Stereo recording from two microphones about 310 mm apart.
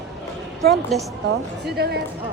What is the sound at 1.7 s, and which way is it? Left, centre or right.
Speech, right.